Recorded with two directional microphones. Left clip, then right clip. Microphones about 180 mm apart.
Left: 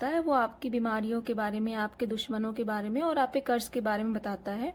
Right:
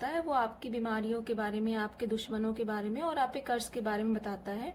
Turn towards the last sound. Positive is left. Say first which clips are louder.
# left 4 dB
turn(degrees=50)  # may be behind; listen again after turning